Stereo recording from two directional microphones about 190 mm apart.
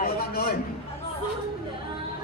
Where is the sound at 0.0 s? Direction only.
50° left (ahead or behind).